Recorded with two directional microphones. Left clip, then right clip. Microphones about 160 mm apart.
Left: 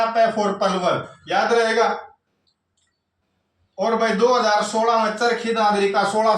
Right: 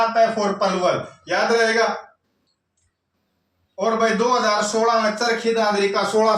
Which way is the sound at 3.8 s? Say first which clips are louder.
Left 1 dB; 10° right (ahead or behind).